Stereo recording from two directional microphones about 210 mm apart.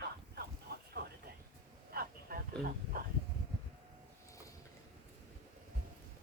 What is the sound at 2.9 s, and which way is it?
Bee, 45° right (ahead or behind).